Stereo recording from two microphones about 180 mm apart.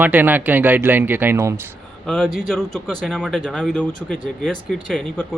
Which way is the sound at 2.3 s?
Centre (ahead or behind).